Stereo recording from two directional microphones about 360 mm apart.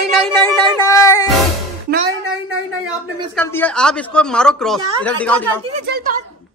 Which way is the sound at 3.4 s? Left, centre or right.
Centre.